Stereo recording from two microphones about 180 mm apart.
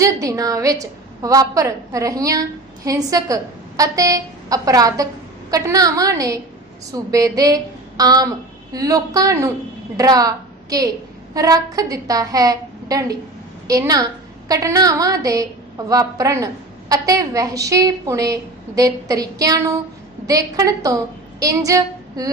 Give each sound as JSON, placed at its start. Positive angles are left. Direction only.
{"t": 0.0, "sound": "a woman's voice", "side_deg": -20}